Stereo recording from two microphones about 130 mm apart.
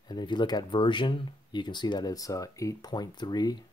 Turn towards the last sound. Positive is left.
turn(degrees=35)  # may be behind; listen again after turning